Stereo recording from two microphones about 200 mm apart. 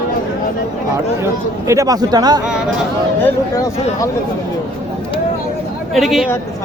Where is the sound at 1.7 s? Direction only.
15° right (ahead or behind).